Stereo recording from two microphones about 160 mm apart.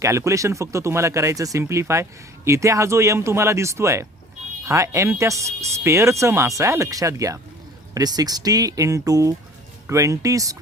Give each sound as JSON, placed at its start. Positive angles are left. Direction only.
{"t": 0.0, "sound": "speech", "side_deg": -20}